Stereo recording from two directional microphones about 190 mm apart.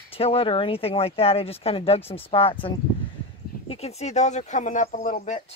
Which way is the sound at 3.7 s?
35° left (ahead or behind).